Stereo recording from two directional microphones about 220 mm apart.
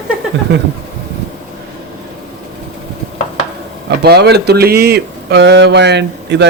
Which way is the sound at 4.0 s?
50° right (ahead or behind).